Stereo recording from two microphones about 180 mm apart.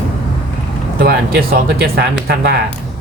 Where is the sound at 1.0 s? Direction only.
60° right (ahead or behind).